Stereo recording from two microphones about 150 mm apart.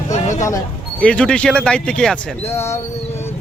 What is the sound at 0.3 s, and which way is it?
Speech, 20° left (ahead or behind).